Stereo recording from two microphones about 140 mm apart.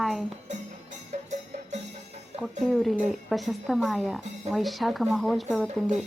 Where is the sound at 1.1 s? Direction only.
55° right (ahead or behind).